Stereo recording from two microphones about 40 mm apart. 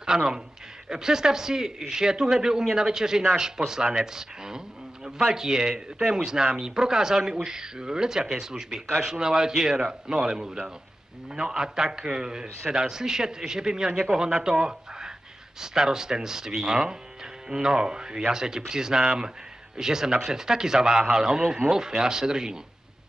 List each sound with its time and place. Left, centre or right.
0.0 s a man's voice: centre